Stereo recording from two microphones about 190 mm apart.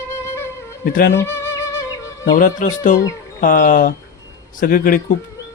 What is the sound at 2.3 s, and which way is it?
Speech, 45° left (ahead or behind).